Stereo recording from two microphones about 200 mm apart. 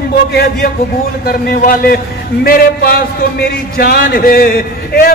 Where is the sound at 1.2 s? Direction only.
45° left (ahead or behind).